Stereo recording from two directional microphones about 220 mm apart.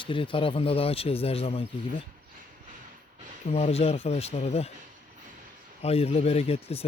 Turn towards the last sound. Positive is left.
turn(degrees=25)  # may be behind; listen again after turning